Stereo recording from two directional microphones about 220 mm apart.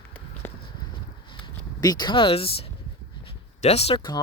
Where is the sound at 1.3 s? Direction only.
20° left (ahead or behind).